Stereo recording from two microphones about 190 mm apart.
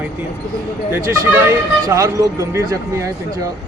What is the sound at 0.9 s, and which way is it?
A man's voice, 15° right (ahead or behind).